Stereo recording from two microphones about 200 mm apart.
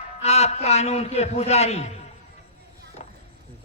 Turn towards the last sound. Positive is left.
turn(degrees=30)  # may be behind; listen again after turning